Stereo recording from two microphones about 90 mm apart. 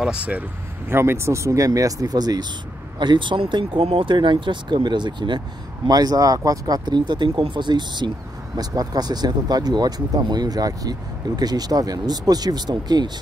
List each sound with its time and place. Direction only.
0.0 s speech: 15° right (ahead or behind); by 2.4 s 45° right (ahead or behind)
3.0 s speech: 60° right (ahead or behind)
5.9 s speech: 45° right (ahead or behind)
7.0 s speech: 60° right (ahead or behind)